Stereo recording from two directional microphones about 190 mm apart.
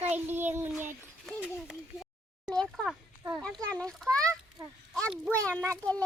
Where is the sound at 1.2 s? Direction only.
Centre (ahead or behind).